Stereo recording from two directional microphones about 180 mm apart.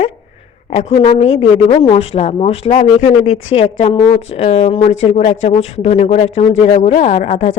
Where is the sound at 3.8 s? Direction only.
25° left (ahead or behind).